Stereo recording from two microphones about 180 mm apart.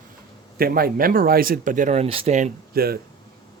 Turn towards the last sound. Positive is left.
turn(degrees=-55)  # may be behind; listen again after turning